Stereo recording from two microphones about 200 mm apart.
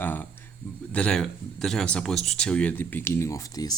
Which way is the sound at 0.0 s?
10° left (ahead or behind).